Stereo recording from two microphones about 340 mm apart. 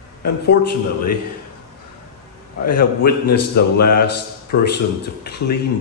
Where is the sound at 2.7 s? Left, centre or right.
Left.